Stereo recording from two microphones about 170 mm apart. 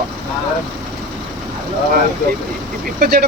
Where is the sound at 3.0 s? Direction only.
65° right (ahead or behind).